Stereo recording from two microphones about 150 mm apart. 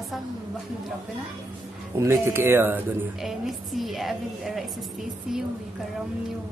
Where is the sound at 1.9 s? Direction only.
15° right (ahead or behind).